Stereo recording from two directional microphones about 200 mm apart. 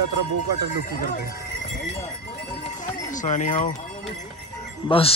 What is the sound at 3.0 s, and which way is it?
Speech, 40° left (ahead or behind).